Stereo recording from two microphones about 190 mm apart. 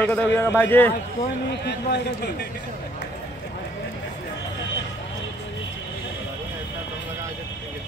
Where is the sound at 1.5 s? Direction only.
60° left (ahead or behind).